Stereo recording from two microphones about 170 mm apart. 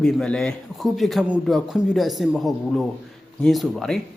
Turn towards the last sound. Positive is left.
turn(degrees=0)  # may be behind; listen again after turning